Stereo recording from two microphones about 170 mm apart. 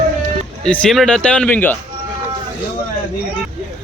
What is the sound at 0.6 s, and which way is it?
Speech, 5° left (ahead or behind).